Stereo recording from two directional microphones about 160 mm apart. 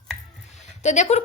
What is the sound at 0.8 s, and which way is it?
Speech, 45° left (ahead or behind).